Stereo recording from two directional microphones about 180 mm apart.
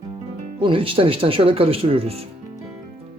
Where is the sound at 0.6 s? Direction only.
30° right (ahead or behind).